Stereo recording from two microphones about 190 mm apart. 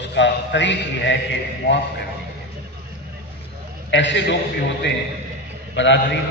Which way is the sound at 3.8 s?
70° left (ahead or behind).